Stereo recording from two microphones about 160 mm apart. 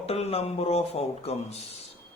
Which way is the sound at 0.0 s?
40° left (ahead or behind).